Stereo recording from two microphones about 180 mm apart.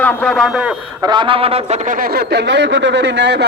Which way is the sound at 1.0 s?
25° right (ahead or behind).